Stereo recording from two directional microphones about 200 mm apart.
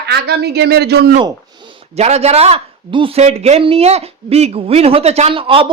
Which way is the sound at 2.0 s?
30° right (ahead or behind).